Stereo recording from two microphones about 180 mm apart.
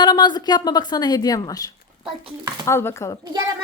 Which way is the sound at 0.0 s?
25° left (ahead or behind).